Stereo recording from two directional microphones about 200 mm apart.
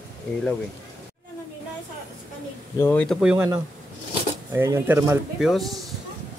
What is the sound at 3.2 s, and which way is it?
Speech, 10° right (ahead or behind).